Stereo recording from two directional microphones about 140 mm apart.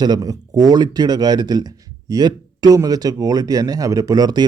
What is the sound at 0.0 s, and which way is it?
A man's voice, 30° right (ahead or behind).